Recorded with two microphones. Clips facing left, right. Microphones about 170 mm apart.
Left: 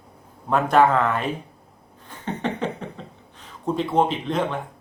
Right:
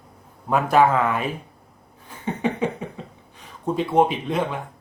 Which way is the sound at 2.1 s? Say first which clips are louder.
Right 2 dB; 10° right (ahead or behind).